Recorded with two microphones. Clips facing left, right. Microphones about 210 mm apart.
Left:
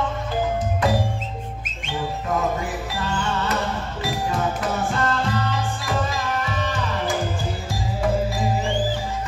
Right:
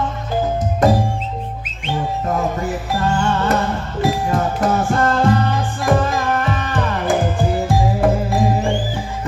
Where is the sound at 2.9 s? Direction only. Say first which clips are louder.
Right 8 dB; 50° right (ahead or behind).